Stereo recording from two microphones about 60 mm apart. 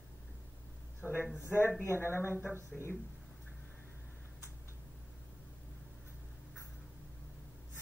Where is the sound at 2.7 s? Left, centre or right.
Centre.